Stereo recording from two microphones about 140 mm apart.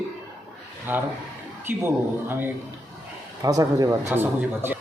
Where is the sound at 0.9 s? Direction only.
15° right (ahead or behind).